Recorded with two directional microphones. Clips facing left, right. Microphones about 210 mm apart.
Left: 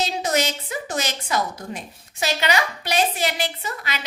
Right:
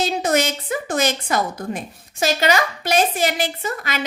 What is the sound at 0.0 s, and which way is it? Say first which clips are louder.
A woman's voice: right 3 dB; 55° right (ahead or behind).